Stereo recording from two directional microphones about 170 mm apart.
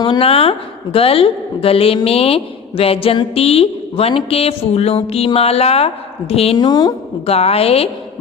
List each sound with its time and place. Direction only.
0.0 s a woman's voice: 30° left (ahead or behind)